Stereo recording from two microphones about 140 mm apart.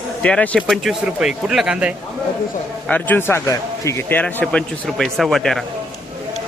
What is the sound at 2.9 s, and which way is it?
A man's voice, 10° left (ahead or behind).